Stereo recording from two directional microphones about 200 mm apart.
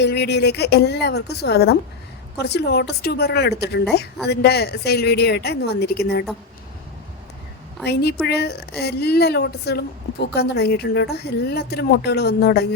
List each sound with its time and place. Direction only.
0.0 s a woman's voice: 55° left (ahead or behind)
8.3 s speech: 55° left (ahead or behind)